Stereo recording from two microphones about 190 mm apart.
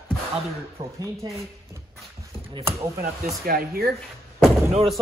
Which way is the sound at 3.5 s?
50° right (ahead or behind).